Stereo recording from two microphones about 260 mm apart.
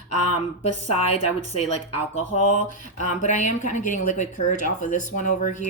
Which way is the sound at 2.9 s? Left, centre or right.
Left.